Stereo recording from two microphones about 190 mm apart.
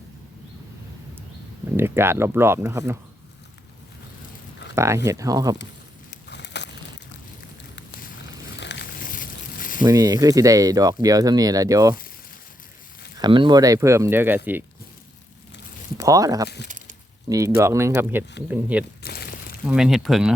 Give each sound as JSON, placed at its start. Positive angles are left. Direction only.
{"t": 1.7, "sound": "speech", "side_deg": -10}
{"t": 4.7, "sound": "speech", "side_deg": -15}
{"t": 6.1, "sound": "a sound", "side_deg": 65}
{"t": 8.5, "sound": "a sound", "side_deg": 65}
{"t": 9.0, "sound": "boat", "side_deg": 45}
{"t": 9.8, "sound": "speech", "side_deg": -20}
{"t": 13.1, "sound": "speech", "side_deg": -25}
{"t": 16.0, "sound": "speech", "side_deg": -15}
{"t": 19.0, "sound": "a sound", "side_deg": 55}
{"t": 19.6, "sound": "speech", "side_deg": -5}